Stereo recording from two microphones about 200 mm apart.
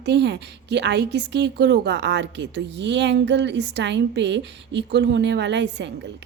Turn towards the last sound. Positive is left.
turn(degrees=-60)  # may be behind; listen again after turning